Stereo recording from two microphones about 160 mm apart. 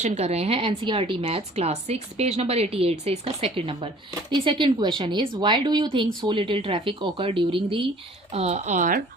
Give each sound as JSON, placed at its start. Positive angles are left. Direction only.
{"t": 0.0, "sound": "a woman's voice", "side_deg": -45}